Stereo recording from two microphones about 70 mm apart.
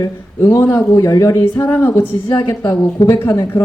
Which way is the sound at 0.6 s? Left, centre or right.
Left.